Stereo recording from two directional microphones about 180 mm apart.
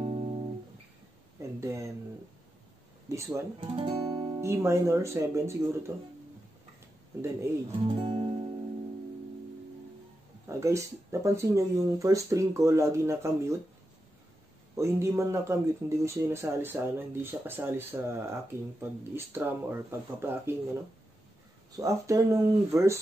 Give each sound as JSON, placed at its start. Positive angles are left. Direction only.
{"t": 0.0, "sound": "music", "side_deg": -35}
{"t": 1.6, "sound": "a sound", "side_deg": -15}
{"t": 3.1, "sound": "speech", "side_deg": -15}
{"t": 3.6, "sound": "speech", "side_deg": -30}
{"t": 7.8, "sound": "music", "side_deg": -30}
{"t": 10.4, "sound": "speech", "side_deg": -15}
{"t": 14.8, "sound": "speech", "side_deg": -15}
{"t": 21.7, "sound": "speech", "side_deg": -20}